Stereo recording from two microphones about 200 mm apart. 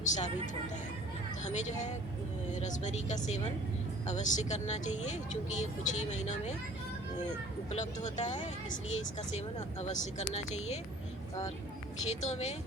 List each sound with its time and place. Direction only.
0.0 s speech: 35° left (ahead or behind)
1.5 s speech: 35° left (ahead or behind)
9.6 s speech: 35° left (ahead or behind)
12.2 s speech: 35° left (ahead or behind)